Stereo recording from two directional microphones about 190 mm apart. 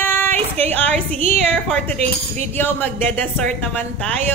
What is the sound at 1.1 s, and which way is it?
Speech, 35° right (ahead or behind).